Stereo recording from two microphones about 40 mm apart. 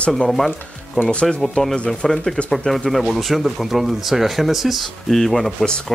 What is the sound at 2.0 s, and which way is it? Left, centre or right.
Speech, centre.